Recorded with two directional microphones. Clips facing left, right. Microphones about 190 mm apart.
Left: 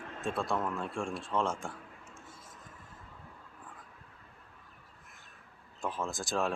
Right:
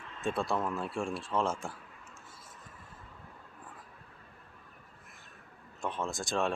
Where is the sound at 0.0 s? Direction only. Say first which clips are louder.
Left 4 dB; 55° left (ahead or behind).